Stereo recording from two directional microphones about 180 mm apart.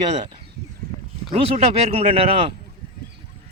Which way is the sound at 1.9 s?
30° right (ahead or behind).